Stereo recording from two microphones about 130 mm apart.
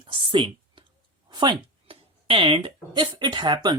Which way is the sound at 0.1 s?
40° right (ahead or behind).